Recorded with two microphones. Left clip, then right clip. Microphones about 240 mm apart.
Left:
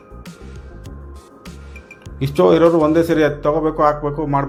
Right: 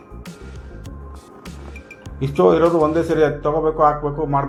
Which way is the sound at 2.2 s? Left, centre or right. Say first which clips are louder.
Left 2 dB; left.